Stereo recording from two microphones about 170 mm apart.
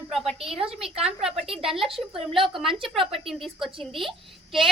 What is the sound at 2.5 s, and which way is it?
Speech, centre (ahead or behind).